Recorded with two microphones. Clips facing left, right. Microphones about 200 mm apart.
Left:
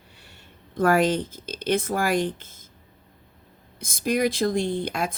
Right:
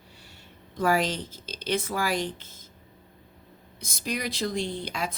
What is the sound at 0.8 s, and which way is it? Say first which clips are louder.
Speech: left 5 dB; 55° left (ahead or behind).